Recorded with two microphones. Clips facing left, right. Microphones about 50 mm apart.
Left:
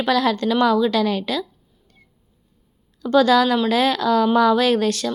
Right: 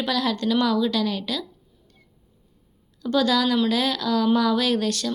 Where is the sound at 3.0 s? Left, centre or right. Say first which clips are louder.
Left 6 dB; left.